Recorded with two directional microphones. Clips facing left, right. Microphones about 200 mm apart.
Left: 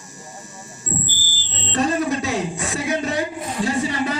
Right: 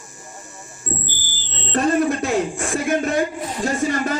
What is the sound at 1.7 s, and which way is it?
A man's voice, 55° right (ahead or behind).